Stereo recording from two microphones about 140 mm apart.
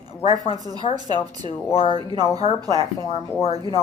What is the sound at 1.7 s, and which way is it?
Speech, 40° left (ahead or behind).